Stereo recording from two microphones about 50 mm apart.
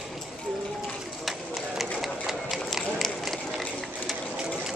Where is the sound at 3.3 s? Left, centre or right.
Centre.